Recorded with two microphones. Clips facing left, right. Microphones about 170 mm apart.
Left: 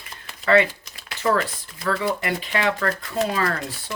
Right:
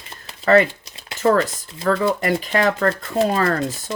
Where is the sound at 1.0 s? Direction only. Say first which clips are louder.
Right 5 dB; 25° right (ahead or behind).